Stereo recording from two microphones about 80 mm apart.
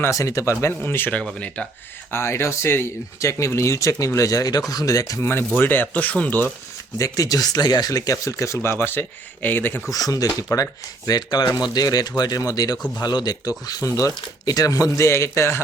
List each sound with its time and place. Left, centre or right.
0.0 s speech: left
0.8 s speech: left
1.1 s speech: centre
2.0 s speech: left
5.2 s speech: left
7.0 s speech: left
9.9 s speech: left